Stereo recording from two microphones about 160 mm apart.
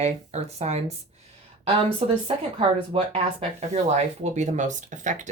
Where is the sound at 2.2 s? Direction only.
35° right (ahead or behind).